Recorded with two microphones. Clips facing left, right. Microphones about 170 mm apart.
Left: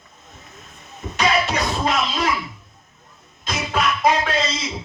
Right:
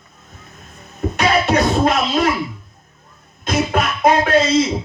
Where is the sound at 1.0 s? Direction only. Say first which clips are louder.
Right 4 dB; 55° right (ahead or behind).